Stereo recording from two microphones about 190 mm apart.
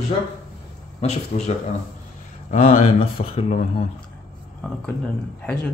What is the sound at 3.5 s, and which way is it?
Speech, 40° left (ahead or behind).